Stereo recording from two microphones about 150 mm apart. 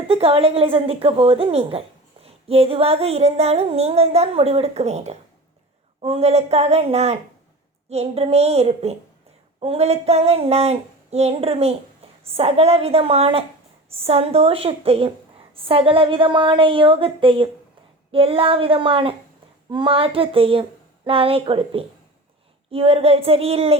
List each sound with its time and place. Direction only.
0.1 s a woman's voice: 40° right (ahead or behind)
2.2 s music: 40° right (ahead or behind)
12.4 s a woman's voice: 45° right (ahead or behind)